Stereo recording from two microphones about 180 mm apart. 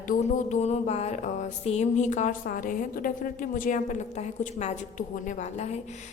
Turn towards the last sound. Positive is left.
turn(degrees=40)  # may be behind; listen again after turning